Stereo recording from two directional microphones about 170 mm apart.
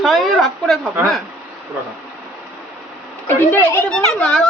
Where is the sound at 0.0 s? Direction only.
Centre (ahead or behind).